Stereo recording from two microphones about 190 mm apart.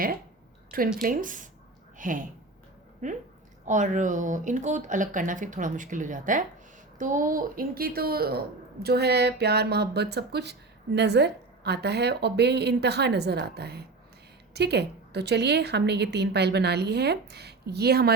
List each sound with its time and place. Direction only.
1.0 s a woman's voice: 45° right (ahead or behind)
3.7 s a woman's voice: 40° right (ahead or behind); by 18.1 s 55° right (ahead or behind)